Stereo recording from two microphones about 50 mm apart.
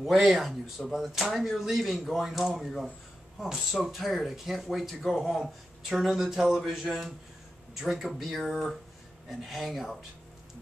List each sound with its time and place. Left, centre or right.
0.0 s speech: centre